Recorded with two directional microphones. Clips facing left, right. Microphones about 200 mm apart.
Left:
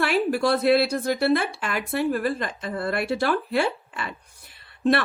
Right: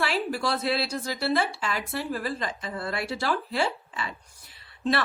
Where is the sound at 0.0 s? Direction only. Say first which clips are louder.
Left 6 dB; 55° left (ahead or behind).